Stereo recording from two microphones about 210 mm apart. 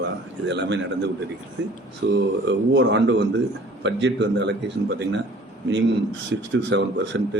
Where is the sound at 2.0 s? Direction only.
60° right (ahead or behind).